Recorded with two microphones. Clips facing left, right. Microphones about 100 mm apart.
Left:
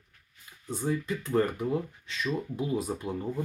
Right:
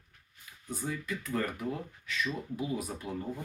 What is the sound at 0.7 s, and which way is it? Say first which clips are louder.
Speech: left 6 dB; 30° left (ahead or behind).